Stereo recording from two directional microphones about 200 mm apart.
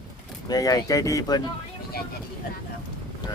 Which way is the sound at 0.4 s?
20° left (ahead or behind).